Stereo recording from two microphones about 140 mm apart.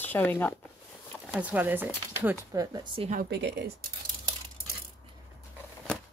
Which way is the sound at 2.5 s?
30° right (ahead or behind).